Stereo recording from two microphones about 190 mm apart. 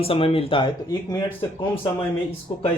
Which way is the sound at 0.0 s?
30° left (ahead or behind).